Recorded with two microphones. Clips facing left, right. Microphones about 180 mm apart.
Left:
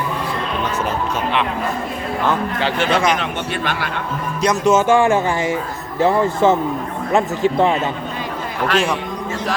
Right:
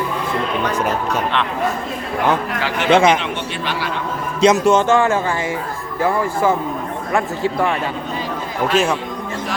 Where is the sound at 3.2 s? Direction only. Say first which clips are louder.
Left 1 dB; 50° left (ahead or behind).